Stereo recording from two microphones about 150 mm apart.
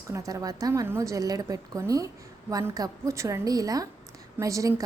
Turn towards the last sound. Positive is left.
turn(degrees=-20)  # may be behind; listen again after turning